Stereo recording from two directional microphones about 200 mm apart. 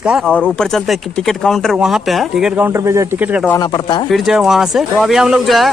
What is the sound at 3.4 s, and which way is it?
Speech, 20° left (ahead or behind).